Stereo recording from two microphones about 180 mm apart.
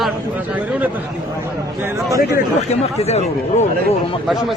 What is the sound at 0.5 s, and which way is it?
Speech, 10° right (ahead or behind).